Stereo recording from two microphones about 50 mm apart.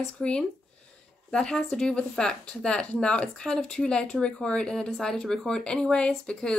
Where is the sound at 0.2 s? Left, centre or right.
Centre.